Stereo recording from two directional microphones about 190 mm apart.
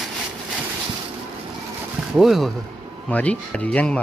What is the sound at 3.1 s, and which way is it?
Speech, 5° left (ahead or behind).